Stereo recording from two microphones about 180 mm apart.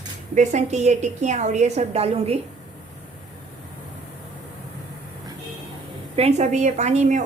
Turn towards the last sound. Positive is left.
turn(degrees=-40)  # may be behind; listen again after turning